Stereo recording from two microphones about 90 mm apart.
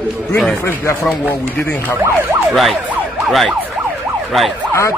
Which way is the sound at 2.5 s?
Centre (ahead or behind).